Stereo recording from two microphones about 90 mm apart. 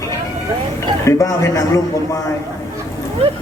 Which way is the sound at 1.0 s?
35° left (ahead or behind).